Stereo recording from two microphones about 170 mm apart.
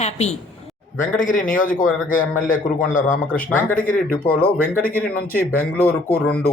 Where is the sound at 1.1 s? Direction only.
50° left (ahead or behind).